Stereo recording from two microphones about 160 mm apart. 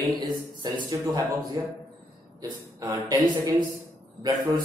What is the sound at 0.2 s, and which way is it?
A man's voice, 25° right (ahead or behind).